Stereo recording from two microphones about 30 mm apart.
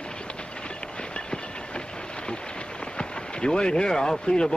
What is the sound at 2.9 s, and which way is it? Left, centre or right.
Speech, left.